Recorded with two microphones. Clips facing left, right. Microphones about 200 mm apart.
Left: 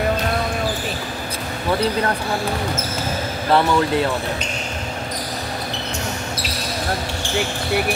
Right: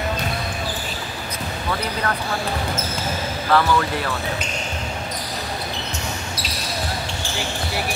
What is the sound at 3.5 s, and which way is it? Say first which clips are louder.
Speech: left 2 dB; 25° left (ahead or behind).